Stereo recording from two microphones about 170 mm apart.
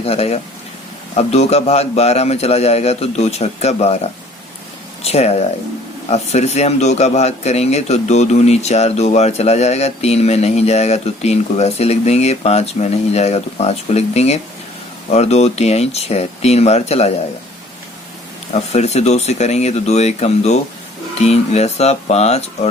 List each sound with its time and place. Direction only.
0.0 s speech: 35° left (ahead or behind)
18.5 s speech: 40° left (ahead or behind)